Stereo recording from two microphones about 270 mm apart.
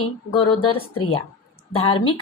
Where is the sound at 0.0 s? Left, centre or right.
Centre.